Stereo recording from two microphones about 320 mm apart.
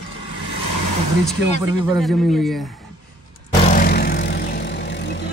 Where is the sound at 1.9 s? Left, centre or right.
Centre.